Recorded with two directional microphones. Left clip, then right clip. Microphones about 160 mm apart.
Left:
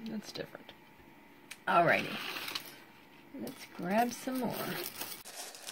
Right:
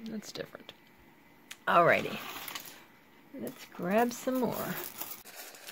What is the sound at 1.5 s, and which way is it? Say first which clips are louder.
Speech: right 3 dB; 65° right (ahead or behind).